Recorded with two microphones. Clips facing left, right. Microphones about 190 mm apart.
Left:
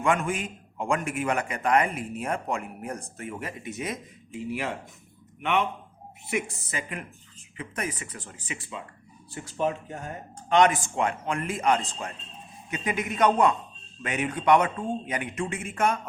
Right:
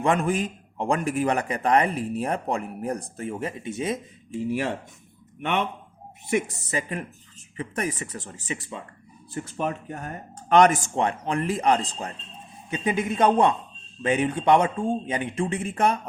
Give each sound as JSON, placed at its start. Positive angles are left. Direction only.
{"t": 0.0, "sound": "a man's voice", "side_deg": -35}
{"t": 6.3, "sound": "a man's voice", "side_deg": -35}
{"t": 9.3, "sound": "speech", "side_deg": -55}
{"t": 10.5, "sound": "a man's voice", "side_deg": -45}